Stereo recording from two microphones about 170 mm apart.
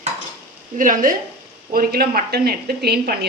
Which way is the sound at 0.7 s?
50° right (ahead or behind).